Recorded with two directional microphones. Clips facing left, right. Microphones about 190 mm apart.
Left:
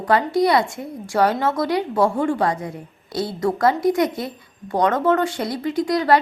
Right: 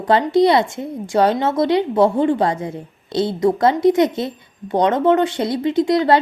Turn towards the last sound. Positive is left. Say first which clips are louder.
# right 3 dB
turn(degrees=-25)  # may be behind; listen again after turning